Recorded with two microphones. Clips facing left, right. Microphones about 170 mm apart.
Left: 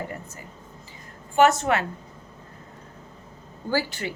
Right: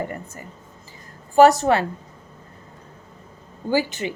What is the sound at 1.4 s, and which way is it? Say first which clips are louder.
Speech: right 5 dB; 35° right (ahead or behind).